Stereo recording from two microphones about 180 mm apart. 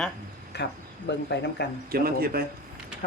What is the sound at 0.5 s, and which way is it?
Speech, 70° left (ahead or behind).